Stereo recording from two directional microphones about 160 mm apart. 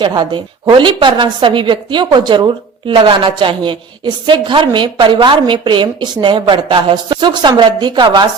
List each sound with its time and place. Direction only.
0.0 s a woman's voice: 25° right (ahead or behind)